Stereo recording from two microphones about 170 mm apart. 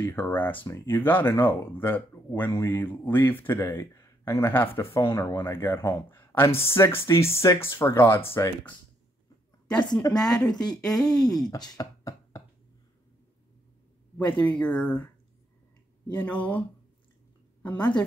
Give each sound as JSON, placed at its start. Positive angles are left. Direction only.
{"t": 0.0, "sound": "speech", "side_deg": 15}
{"t": 10.1, "sound": "speech", "side_deg": 5}
{"t": 11.4, "sound": "chopping", "side_deg": 25}
{"t": 14.4, "sound": "speech", "side_deg": 10}
{"t": 16.1, "sound": "a woman's voice", "side_deg": 10}